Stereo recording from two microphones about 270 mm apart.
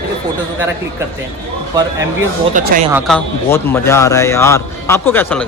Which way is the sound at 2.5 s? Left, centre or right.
Right.